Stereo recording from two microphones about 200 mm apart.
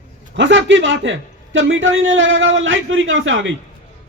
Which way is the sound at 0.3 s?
70° right (ahead or behind).